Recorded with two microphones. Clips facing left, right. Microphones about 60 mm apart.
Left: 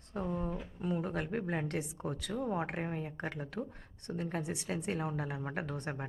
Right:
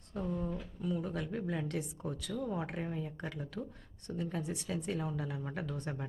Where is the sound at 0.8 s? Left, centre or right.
Left.